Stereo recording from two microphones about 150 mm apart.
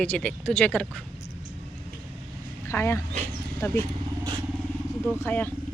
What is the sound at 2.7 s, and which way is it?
Speech, 15° left (ahead or behind).